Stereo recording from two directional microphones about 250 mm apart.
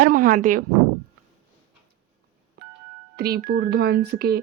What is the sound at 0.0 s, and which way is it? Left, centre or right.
Speech, right.